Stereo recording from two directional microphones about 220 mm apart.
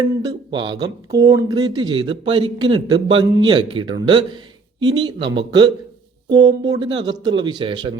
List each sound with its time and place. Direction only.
0.0 s speech: 20° right (ahead or behind)